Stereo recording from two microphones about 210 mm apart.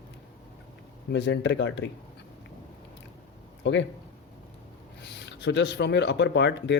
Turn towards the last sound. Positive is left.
turn(degrees=55)  # may be behind; listen again after turning